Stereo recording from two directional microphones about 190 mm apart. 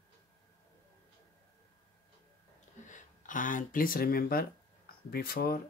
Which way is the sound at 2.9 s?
45° left (ahead or behind).